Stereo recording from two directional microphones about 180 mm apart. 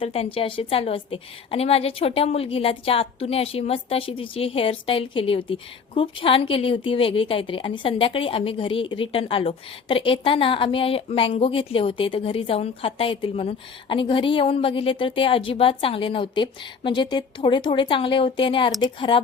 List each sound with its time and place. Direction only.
0.0 s a woman's voice: 30° left (ahead or behind)